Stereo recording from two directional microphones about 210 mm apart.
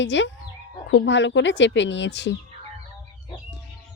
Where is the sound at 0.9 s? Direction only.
60° left (ahead or behind).